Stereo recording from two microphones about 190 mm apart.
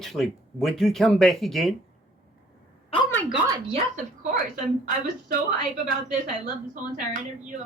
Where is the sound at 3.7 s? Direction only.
40° right (ahead or behind).